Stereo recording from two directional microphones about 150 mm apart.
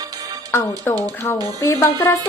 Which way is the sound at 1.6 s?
20° left (ahead or behind).